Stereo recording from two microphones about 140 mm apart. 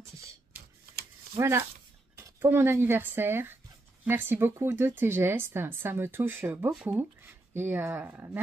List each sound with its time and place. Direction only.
1.4 s speech: 20° right (ahead or behind)